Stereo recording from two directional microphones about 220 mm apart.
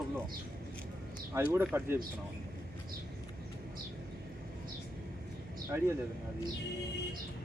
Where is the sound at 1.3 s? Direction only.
10° right (ahead or behind).